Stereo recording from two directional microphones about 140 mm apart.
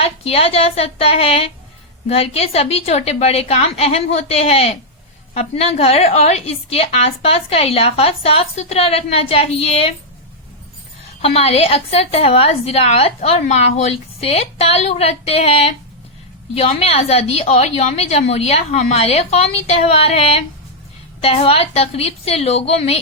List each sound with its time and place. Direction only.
0.0 s a woman's voice: 45° left (ahead or behind)
11.2 s a woman's voice: 45° left (ahead or behind)